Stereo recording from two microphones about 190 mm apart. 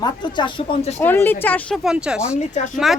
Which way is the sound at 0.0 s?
25° left (ahead or behind).